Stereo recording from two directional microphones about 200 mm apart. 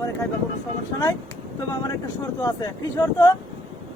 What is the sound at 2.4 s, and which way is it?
Speech, 15° left (ahead or behind).